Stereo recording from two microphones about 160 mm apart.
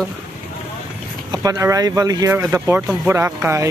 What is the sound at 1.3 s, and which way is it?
Speech, 20° right (ahead or behind).